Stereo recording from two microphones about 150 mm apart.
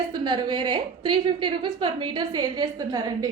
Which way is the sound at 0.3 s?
30° right (ahead or behind).